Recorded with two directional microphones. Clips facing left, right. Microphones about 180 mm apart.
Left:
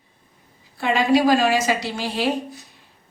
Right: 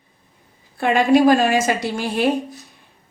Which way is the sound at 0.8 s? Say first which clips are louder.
Right 3 dB; 50° right (ahead or behind).